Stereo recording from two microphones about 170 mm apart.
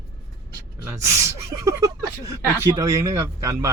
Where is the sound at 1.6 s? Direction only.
20° right (ahead or behind).